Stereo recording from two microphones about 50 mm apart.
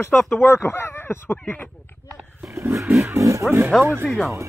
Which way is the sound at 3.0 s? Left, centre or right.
Right.